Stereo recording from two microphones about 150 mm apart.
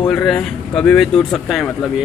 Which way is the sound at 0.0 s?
5° left (ahead or behind).